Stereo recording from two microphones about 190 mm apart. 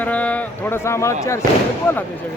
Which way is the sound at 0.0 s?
5° left (ahead or behind).